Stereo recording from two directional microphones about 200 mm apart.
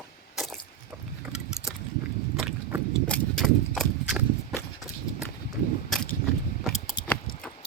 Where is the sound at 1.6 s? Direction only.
5° right (ahead or behind).